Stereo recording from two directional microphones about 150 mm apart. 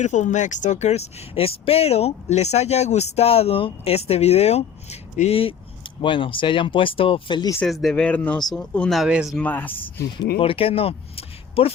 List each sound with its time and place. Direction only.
0.0 s speech: 55° left (ahead or behind); by 7.5 s 30° left (ahead or behind)
7.6 s speech: centre (ahead or behind)
9.3 s speech: 10° left (ahead or behind)
10.4 s speech: 40° left (ahead or behind)